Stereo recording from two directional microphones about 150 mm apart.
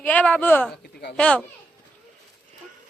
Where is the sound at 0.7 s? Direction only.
90° left.